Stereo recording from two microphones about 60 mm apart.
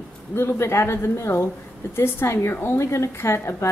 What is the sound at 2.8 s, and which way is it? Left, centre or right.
Speech, left.